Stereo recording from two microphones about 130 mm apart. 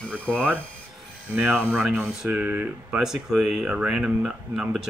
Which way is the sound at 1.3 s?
10° right (ahead or behind).